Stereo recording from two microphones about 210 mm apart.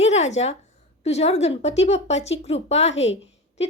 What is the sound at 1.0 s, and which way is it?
A woman's voice, 30° left (ahead or behind).